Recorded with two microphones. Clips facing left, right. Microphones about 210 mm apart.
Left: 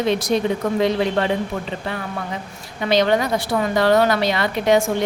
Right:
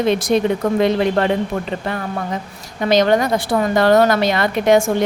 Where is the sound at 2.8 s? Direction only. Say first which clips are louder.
Right 3 dB; 45° right (ahead or behind).